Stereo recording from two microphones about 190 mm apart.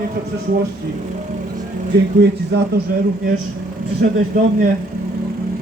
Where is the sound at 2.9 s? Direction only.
45° right (ahead or behind).